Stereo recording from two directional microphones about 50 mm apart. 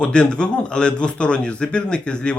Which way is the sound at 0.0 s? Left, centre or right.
Centre.